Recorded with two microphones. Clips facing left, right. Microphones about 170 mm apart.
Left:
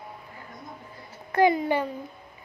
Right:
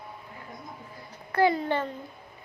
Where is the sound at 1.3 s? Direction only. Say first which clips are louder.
Left 3 dB; 15° left (ahead or behind).